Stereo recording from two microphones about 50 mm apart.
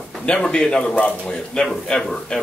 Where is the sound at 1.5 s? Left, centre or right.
Centre.